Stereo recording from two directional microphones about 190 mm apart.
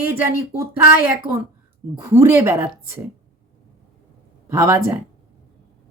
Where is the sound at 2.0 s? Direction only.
15° right (ahead or behind).